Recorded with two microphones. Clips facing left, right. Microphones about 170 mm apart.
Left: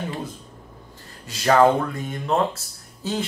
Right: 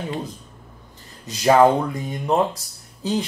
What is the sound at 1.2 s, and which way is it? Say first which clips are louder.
Speech: right 2 dB; 20° right (ahead or behind).